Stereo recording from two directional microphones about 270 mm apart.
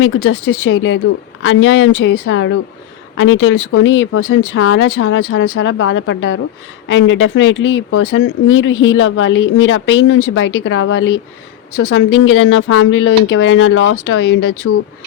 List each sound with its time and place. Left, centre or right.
0.0 s speech: left